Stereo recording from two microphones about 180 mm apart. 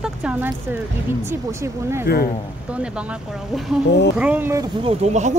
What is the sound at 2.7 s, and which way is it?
Speech, 5° right (ahead or behind).